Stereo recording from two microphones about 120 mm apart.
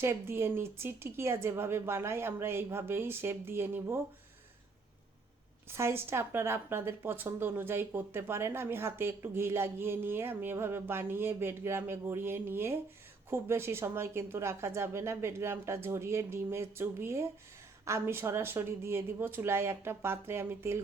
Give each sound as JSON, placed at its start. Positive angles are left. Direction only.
{"t": 0.0, "sound": "a woman's voice", "side_deg": -20}
{"t": 5.6, "sound": "a woman's voice", "side_deg": -20}